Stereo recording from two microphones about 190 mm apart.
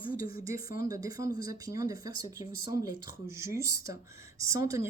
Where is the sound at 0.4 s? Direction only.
15° right (ahead or behind).